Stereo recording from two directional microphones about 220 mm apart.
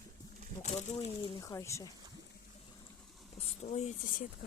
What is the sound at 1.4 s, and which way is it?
Speech, 15° left (ahead or behind).